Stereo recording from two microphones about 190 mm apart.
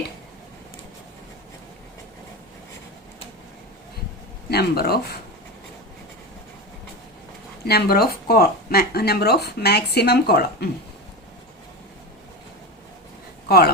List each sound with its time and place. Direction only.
4.4 s speech: 55° left (ahead or behind)
7.6 s speech: 55° left (ahead or behind)